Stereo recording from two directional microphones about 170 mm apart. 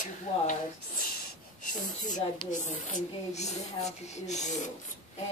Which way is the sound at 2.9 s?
40° left (ahead or behind).